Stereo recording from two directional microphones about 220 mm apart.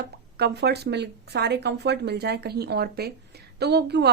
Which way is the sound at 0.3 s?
50° right (ahead or behind).